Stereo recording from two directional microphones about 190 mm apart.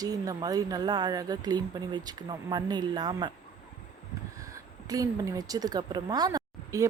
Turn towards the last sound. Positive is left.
turn(degrees=-20)  # may be behind; listen again after turning